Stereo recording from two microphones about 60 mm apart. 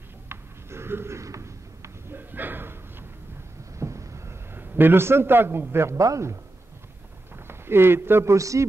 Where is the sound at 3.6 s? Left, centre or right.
Right.